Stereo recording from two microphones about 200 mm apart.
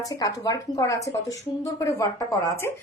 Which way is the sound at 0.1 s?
15° left (ahead or behind).